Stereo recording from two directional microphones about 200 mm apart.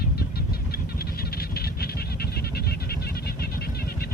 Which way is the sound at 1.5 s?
50° left (ahead or behind).